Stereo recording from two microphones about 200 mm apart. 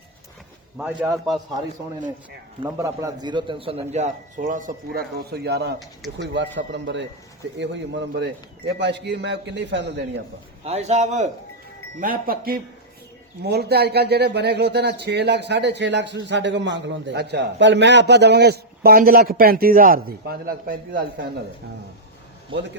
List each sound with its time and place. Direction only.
0.9 s a man's voice: 15° right (ahead or behind)
2.6 s a man's voice: 15° right (ahead or behind); by 10.0 s 60° right (ahead or behind)
10.6 s a man's voice: 30° right (ahead or behind)